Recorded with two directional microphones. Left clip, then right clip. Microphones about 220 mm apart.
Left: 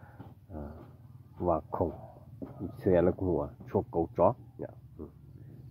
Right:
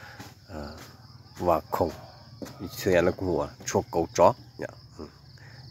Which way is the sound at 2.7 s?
Centre (ahead or behind).